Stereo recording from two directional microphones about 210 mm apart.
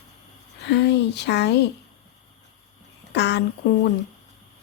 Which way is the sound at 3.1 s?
55° left (ahead or behind).